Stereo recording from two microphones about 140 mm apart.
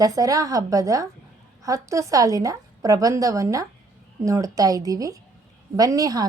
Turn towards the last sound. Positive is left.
turn(degrees=-25)  # may be behind; listen again after turning